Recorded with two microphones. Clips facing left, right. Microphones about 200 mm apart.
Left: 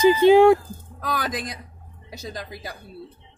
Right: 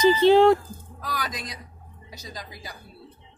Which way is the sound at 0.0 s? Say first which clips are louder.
Left 2 dB; 50° left (ahead or behind).